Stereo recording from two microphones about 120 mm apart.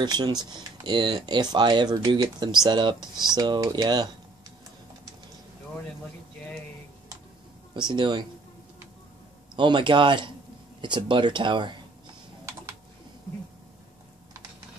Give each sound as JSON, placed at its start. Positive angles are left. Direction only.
{"t": 0.0, "sound": "speech", "side_deg": -40}
{"t": 7.7, "sound": "speech", "side_deg": -40}
{"t": 9.6, "sound": "speech", "side_deg": -40}